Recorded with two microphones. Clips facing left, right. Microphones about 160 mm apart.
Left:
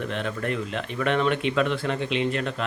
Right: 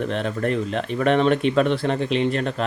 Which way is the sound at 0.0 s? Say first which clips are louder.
Right 5 dB; 35° right (ahead or behind).